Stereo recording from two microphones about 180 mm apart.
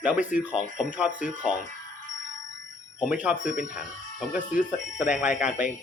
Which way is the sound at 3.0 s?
5° right (ahead or behind).